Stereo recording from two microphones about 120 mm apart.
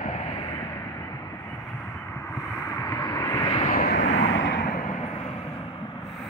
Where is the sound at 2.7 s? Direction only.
35° left (ahead or behind).